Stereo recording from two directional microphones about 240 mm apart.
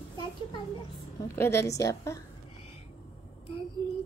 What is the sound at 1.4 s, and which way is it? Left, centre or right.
Speech, centre.